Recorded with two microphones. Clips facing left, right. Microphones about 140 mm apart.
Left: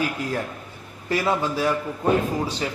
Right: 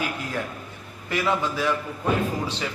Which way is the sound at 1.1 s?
35° left (ahead or behind).